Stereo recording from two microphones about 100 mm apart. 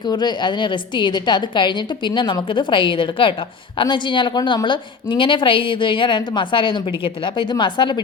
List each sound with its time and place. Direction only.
0.0 s a woman's voice: 45° left (ahead or behind)